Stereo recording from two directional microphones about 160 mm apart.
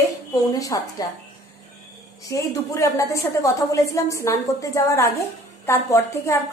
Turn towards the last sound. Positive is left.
turn(degrees=15)  # may be behind; listen again after turning